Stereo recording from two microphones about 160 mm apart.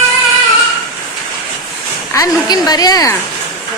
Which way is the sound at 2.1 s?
25° left (ahead or behind).